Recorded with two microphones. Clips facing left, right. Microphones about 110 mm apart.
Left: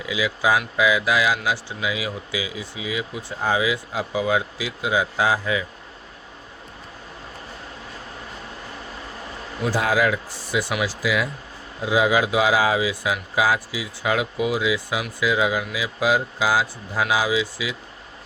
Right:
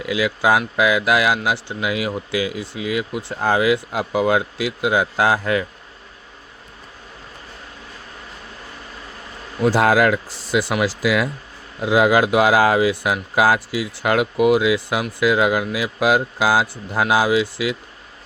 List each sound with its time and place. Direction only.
0.0 s speech: 60° right (ahead or behind)
9.7 s a man's voice: 65° right (ahead or behind); by 10.7 s 90° right
10.8 s speech: 70° right (ahead or behind)